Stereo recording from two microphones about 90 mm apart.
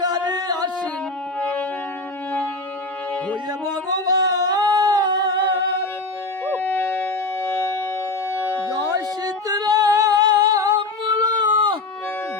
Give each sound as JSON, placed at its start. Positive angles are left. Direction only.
{"t": 0.0, "sound": "singing", "side_deg": -50}
{"t": 3.7, "sound": "singing", "side_deg": -50}
{"t": 6.4, "sound": "howl", "side_deg": 20}
{"t": 8.3, "sound": "music", "side_deg": 35}
{"t": 9.2, "sound": "female singing", "side_deg": -50}
{"t": 11.0, "sound": "a sound", "side_deg": -55}